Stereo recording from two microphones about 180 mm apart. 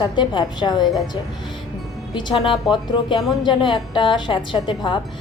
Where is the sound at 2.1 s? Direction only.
30° left (ahead or behind).